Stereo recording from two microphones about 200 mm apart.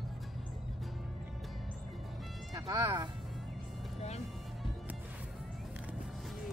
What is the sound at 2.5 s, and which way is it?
Speech, 20° right (ahead or behind).